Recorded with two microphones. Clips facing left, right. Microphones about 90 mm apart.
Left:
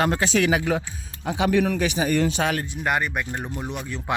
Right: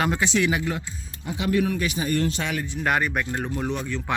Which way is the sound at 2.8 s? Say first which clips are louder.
Right 1 dB; 5° left (ahead or behind).